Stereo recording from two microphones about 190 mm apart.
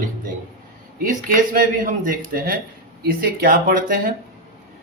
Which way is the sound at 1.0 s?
45° right (ahead or behind).